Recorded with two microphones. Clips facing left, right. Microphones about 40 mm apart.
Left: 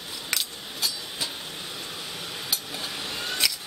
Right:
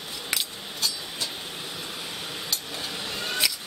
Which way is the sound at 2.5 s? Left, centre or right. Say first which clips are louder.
Left 2 dB; centre.